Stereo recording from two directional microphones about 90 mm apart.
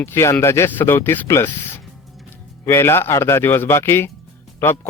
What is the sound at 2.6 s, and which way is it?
A man's voice, 30° left (ahead or behind).